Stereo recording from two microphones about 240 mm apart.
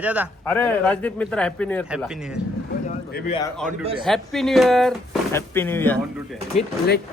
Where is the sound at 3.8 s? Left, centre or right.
Right.